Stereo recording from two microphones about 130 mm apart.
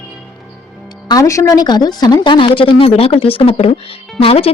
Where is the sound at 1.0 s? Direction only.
25° left (ahead or behind).